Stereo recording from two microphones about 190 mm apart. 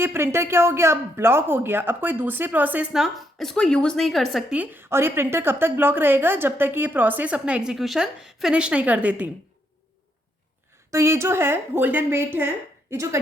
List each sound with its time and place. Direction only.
0.0 s speech: 15° right (ahead or behind)
10.9 s speech: 15° right (ahead or behind)